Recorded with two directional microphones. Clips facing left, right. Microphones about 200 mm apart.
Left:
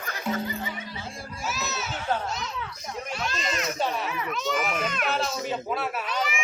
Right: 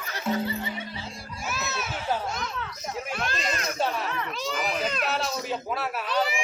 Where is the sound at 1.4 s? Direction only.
55° right (ahead or behind).